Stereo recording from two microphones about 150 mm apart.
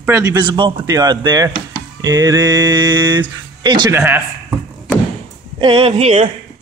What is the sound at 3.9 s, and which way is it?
Speech, 15° right (ahead or behind).